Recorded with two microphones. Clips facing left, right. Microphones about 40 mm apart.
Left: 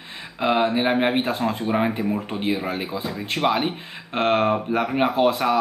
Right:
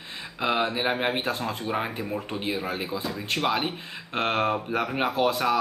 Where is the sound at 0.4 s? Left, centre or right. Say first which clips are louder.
Left 5 dB; centre.